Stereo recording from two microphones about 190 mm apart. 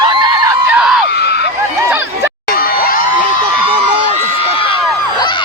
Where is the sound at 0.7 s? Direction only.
5° right (ahead or behind).